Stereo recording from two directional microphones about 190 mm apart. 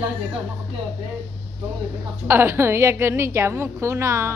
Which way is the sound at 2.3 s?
10° right (ahead or behind).